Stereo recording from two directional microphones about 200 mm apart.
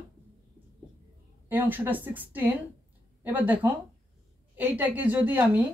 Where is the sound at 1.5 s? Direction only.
10° right (ahead or behind).